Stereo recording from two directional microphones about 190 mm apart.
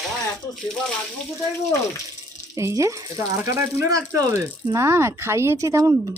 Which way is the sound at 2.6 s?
15° right (ahead or behind).